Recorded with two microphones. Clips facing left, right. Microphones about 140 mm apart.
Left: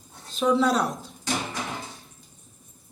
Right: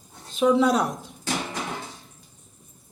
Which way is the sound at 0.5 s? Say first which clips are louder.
Even; 15° right (ahead or behind).